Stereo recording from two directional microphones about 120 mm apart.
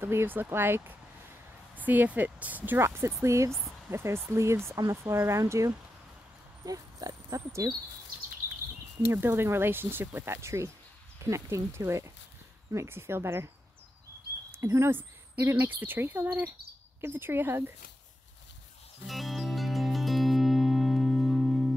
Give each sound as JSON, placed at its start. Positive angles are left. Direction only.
{"t": 0.0, "sound": "speech", "side_deg": -20}
{"t": 9.1, "sound": "speech", "side_deg": -20}
{"t": 14.5, "sound": "speech", "side_deg": -20}
{"t": 19.0, "sound": "music", "side_deg": 0}